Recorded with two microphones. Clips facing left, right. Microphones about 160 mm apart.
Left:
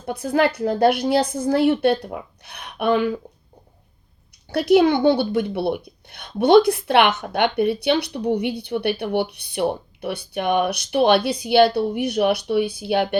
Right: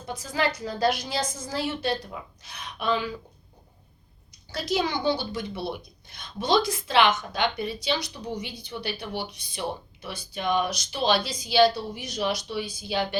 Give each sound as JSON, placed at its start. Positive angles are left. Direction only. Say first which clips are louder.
{"t": 0.0, "sound": "a woman's voice", "louder": "left 8 dB", "side_deg": 60}
{"t": 4.4, "sound": "a woman's voice", "louder": "left 12 dB", "side_deg": 60}